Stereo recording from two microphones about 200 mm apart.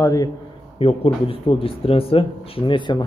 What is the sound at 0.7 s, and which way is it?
Speech, 30° left (ahead or behind).